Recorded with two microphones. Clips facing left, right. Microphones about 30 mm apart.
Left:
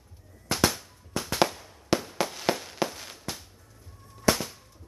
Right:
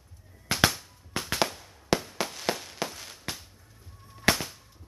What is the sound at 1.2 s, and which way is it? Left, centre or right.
Fireworks, right.